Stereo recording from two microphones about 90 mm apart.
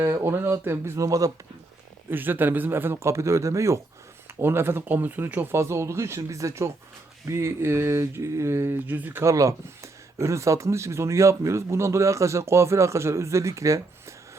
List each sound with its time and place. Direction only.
0.0 s speech: 30° right (ahead or behind)
2.0 s speech: 20° right (ahead or behind)
9.3 s speech: 35° right (ahead or behind)